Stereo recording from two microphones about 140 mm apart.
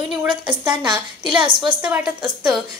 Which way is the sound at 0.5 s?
35° right (ahead or behind).